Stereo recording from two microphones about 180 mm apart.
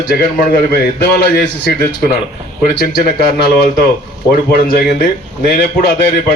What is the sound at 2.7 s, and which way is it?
A man's voice, 60° left (ahead or behind).